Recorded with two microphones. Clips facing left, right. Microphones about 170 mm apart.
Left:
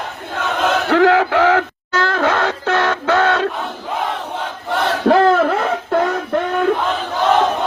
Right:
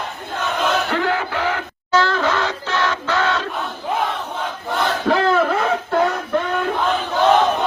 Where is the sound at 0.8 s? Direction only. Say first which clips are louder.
Left 8 dB; 90° left.